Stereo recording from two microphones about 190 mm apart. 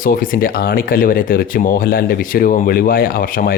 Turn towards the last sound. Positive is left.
turn(degrees=50)  # may be behind; listen again after turning